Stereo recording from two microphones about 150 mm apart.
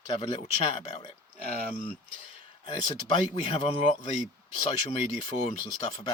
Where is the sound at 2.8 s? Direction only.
35° left (ahead or behind).